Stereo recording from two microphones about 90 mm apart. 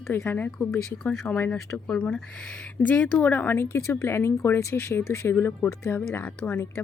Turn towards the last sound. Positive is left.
turn(degrees=20)  # may be behind; listen again after turning